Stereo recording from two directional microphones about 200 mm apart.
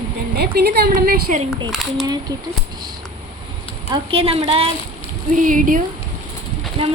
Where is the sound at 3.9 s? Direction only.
25° right (ahead or behind).